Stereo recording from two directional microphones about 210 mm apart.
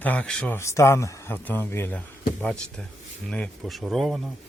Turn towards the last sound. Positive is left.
turn(degrees=0)  # may be behind; listen again after turning